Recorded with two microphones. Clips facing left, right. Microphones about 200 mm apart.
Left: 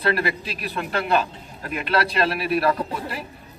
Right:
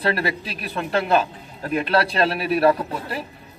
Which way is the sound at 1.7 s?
30° right (ahead or behind).